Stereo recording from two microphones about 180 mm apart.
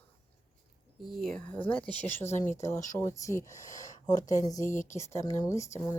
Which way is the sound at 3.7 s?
45° left (ahead or behind).